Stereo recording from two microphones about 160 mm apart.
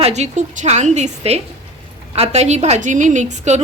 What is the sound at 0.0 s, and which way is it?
A woman's voice, 45° right (ahead or behind).